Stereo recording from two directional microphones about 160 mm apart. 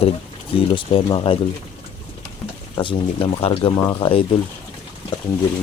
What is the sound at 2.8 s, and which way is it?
Speech, 30° left (ahead or behind).